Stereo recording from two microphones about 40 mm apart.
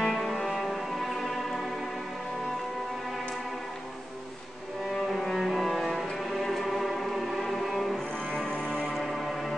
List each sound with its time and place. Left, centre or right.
0.0 s music: centre
5.1 s cello: centre
6.1 s music: centre
8.5 s music: left
8.9 s a sound: centre